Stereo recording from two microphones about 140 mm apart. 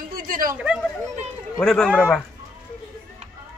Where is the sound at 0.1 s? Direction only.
90° right.